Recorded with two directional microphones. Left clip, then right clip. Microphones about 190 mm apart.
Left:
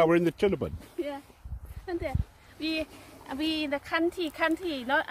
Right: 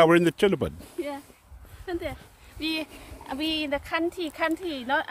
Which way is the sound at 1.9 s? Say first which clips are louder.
Right 1 dB; 55° right (ahead or behind).